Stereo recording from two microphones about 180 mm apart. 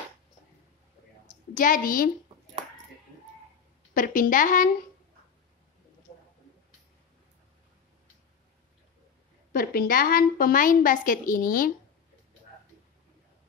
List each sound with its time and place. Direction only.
1.5 s a woman's voice: 50° left (ahead or behind)
3.9 s a woman's voice: 50° left (ahead or behind)
9.5 s a woman's voice: 55° left (ahead or behind)